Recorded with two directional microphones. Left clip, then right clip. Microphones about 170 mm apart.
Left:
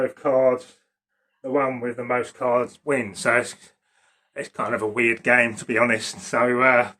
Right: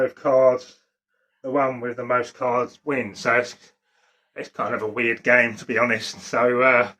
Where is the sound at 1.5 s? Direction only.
5° left (ahead or behind).